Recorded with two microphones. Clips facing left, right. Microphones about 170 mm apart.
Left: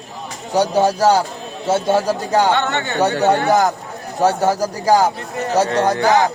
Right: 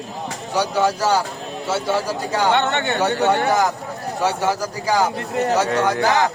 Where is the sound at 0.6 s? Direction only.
40° left (ahead or behind).